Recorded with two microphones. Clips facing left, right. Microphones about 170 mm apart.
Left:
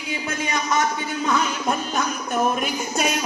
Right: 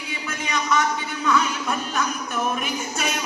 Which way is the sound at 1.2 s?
40° left (ahead or behind).